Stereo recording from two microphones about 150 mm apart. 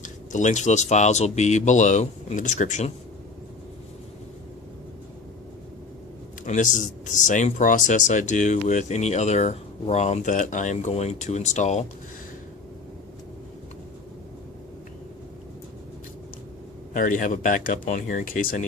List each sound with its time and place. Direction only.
0.0 s speech: 55° left (ahead or behind)
6.4 s speech: 55° left (ahead or behind)
16.9 s speech: 65° left (ahead or behind)